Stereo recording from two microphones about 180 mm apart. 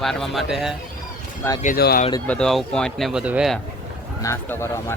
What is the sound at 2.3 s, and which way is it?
Speech, 5° left (ahead or behind).